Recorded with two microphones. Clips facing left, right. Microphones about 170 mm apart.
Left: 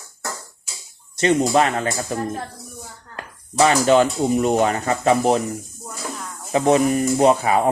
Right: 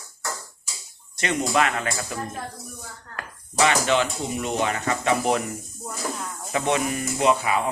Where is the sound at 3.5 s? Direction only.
40° left (ahead or behind).